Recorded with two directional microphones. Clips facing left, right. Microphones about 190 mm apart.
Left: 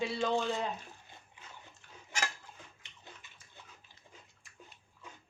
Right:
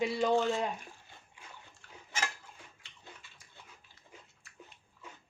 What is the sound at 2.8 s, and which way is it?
Bathtub, 20° left (ahead or behind).